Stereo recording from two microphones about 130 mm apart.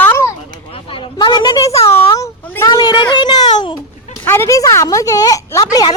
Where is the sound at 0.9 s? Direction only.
35° left (ahead or behind).